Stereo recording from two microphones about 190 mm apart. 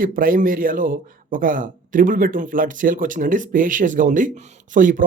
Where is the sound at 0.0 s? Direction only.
45° right (ahead or behind).